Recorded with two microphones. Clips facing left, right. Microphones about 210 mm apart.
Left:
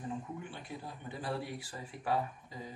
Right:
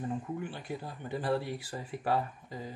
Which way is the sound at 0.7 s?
Centre (ahead or behind).